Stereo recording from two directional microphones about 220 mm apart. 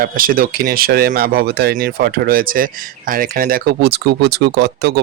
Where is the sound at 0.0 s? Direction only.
40° right (ahead or behind).